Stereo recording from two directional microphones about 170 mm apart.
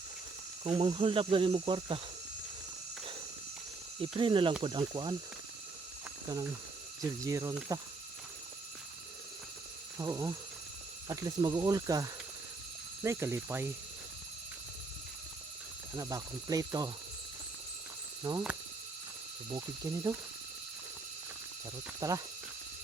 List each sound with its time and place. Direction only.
0.6 s speech: 30° right (ahead or behind)
4.0 s speech: 30° right (ahead or behind)
6.2 s speech: 20° right (ahead or behind)
10.0 s speech: 20° right (ahead or behind)
16.0 s speech: 20° right (ahead or behind)
18.2 s speech: 20° right (ahead or behind)
19.6 s speech: 20° right (ahead or behind)
22.0 s speech: 20° right (ahead or behind)